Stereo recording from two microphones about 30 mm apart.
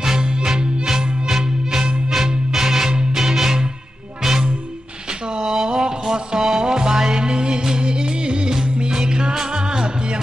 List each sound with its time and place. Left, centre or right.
0.0 s music: right
5.5 s music: centre